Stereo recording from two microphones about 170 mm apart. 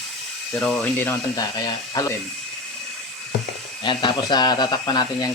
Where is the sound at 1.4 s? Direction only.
20° left (ahead or behind).